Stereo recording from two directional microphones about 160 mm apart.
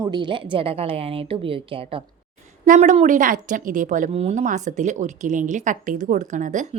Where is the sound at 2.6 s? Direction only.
50° right (ahead or behind).